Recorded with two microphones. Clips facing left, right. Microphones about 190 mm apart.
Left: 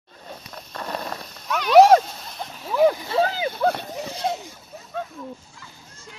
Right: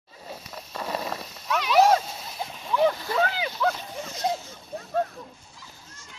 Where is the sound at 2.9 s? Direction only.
25° left (ahead or behind); by 3.6 s 50° left (ahead or behind).